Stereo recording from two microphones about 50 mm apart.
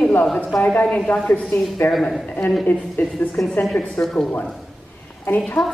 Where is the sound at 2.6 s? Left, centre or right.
Left.